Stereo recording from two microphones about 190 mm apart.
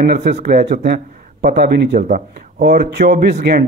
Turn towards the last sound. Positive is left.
turn(degrees=-55)  # may be behind; listen again after turning